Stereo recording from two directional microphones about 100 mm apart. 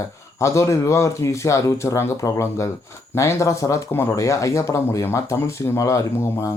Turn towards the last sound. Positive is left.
turn(degrees=30)  # may be behind; listen again after turning